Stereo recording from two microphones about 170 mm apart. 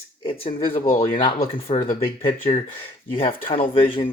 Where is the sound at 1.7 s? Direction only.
35° left (ahead or behind).